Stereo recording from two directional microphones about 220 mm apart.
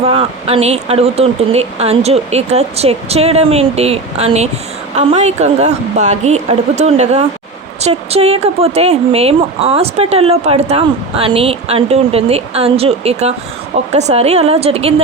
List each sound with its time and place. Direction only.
0.1 s a woman's voice: 25° right (ahead or behind)